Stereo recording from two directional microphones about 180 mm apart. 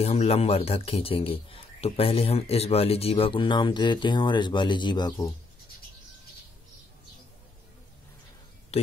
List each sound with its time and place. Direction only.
0.0 s a man's voice: 35° left (ahead or behind)